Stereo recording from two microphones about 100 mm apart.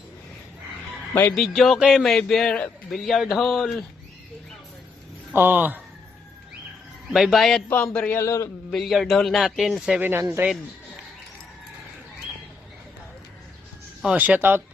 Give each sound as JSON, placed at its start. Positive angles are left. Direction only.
{"t": 1.4, "sound": "speech", "side_deg": 0}
{"t": 5.3, "sound": "speech", "side_deg": -20}
{"t": 7.1, "sound": "speech", "side_deg": -5}
{"t": 8.1, "sound": "a man's voice", "side_deg": 30}
{"t": 8.7, "sound": "speech", "side_deg": 0}
{"t": 10.0, "sound": "speech", "side_deg": -20}
{"t": 14.0, "sound": "speech", "side_deg": -15}